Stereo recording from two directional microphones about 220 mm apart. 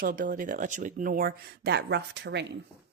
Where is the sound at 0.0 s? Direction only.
40° right (ahead or behind).